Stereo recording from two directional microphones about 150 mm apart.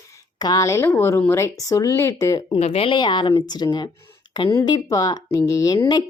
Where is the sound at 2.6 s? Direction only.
40° left (ahead or behind).